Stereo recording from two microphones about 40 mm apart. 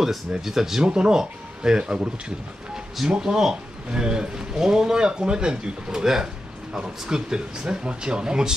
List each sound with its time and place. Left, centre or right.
0.5 s speech: centre